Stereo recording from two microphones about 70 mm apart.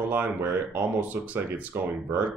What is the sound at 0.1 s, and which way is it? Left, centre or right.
Speech, right.